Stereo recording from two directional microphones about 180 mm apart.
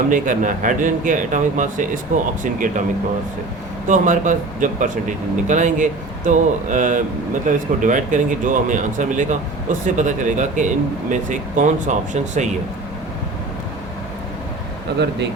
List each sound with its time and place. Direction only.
0.1 s speech: 45° right (ahead or behind)
3.8 s speech: 45° right (ahead or behind)